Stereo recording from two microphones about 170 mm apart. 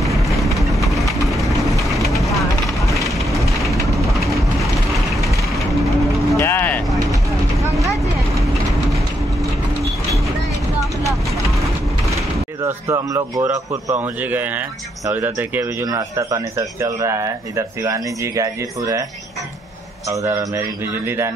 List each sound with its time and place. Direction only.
0.0 s a sound: centre (ahead or behind)
1.2 s train: centre (ahead or behind)
2.1 s vehicle: centre (ahead or behind)
3.1 s mechanisms: centre (ahead or behind)
4.6 s vehicle: centre (ahead or behind)
6.3 s vehicle: 15° left (ahead or behind)
12.6 s speech: 20° right (ahead or behind)
20.1 s speech: 20° right (ahead or behind)